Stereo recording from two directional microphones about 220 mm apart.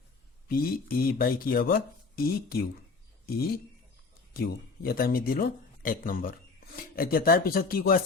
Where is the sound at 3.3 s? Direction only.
45° left (ahead or behind).